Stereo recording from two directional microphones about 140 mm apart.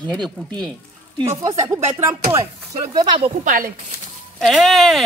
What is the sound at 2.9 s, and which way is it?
Speech, 30° right (ahead or behind).